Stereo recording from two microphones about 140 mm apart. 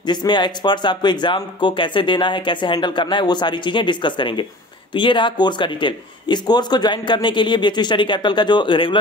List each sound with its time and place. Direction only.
0.0 s speech: 30° left (ahead or behind)